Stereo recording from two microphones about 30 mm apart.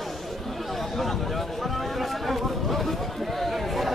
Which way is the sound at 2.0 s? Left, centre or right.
Centre.